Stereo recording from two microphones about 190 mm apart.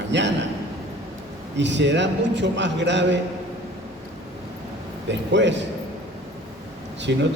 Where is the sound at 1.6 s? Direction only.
70° right (ahead or behind).